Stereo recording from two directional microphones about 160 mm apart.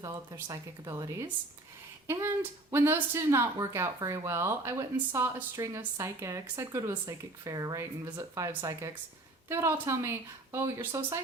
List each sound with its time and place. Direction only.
0.0 s speech: 20° right (ahead or behind)